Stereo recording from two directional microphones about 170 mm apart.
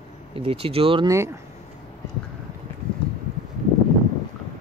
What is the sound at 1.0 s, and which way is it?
Speech, 15° right (ahead or behind).